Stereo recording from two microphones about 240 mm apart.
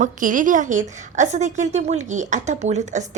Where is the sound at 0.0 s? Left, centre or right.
Right.